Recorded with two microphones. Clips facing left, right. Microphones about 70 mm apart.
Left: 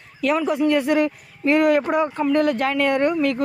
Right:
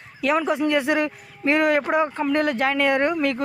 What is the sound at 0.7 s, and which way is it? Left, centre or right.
Speech, centre.